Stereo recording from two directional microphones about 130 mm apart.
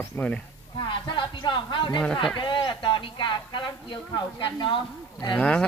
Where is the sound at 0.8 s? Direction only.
35° left (ahead or behind).